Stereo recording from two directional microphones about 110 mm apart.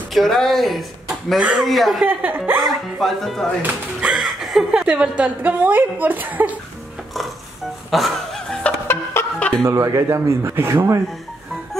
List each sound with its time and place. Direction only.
0.1 s speech: centre (ahead or behind)
2.0 s speech: 20° right (ahead or behind)
3.0 s speech: centre (ahead or behind); by 6.5 s 15° right (ahead or behind)
7.9 s a sound: centre (ahead or behind)
8.8 s music: 20° left (ahead or behind)
9.6 s speech: 25° right (ahead or behind)